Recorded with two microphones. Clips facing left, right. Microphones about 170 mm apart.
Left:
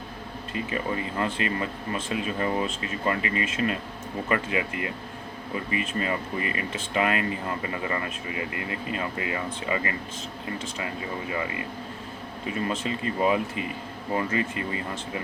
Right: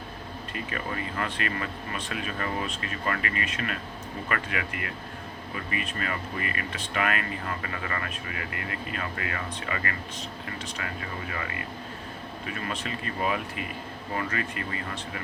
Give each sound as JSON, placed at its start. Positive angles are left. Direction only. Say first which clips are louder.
{"t": 0.5, "sound": "speech", "louder": "left 5 dB", "side_deg": 25}